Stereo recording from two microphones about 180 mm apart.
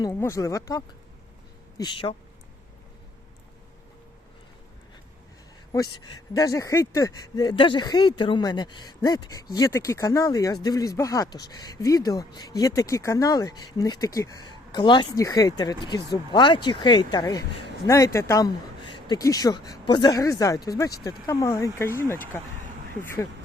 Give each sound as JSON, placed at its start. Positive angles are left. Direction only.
{"t": 0.0, "sound": "speech", "side_deg": 15}
{"t": 6.3, "sound": "speech", "side_deg": 20}